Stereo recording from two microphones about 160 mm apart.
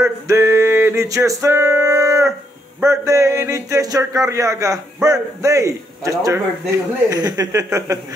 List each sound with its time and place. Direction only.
0.0 s music: 15° right (ahead or behind)
2.8 s a man's voice: 20° right (ahead or behind)